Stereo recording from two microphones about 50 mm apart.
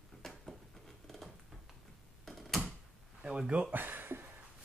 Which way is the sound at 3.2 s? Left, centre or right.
Right.